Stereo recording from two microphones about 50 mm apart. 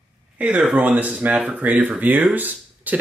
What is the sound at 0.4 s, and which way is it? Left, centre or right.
Speech, right.